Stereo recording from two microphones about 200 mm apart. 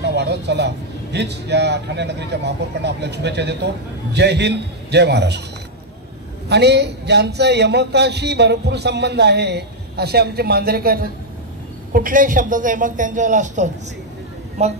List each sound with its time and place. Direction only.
0.0 s speech: 60° right (ahead or behind)
6.5 s a man's voice: 55° right (ahead or behind); by 14.7 s 35° right (ahead or behind)